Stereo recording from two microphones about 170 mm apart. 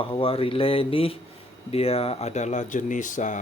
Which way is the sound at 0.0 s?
30° left (ahead or behind).